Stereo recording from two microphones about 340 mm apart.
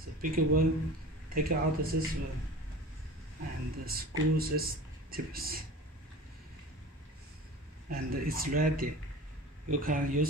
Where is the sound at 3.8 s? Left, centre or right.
Right.